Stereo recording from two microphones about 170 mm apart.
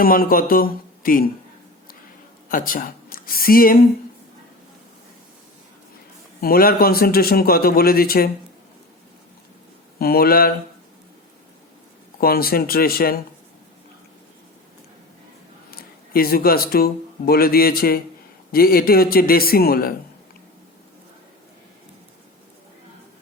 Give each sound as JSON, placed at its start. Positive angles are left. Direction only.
{"t": 0.0, "sound": "a man's voice", "side_deg": 60}
{"t": 2.5, "sound": "speech", "side_deg": 55}
{"t": 6.4, "sound": "a man's voice", "side_deg": 60}
{"t": 10.0, "sound": "a man's voice", "side_deg": 65}
{"t": 12.2, "sound": "a man's voice", "side_deg": 65}
{"t": 15.7, "sound": "a man's voice", "side_deg": 60}